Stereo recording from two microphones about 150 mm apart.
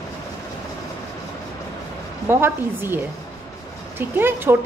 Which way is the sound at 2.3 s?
15° right (ahead or behind).